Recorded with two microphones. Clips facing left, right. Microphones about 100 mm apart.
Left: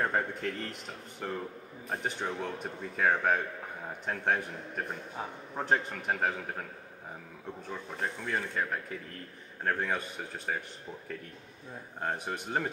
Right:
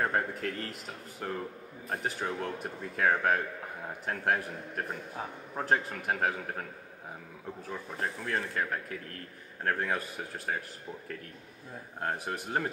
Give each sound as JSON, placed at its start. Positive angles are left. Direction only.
{"t": 0.0, "sound": "a man's voice", "side_deg": -5}
{"t": 12.0, "sound": "a man's voice", "side_deg": 0}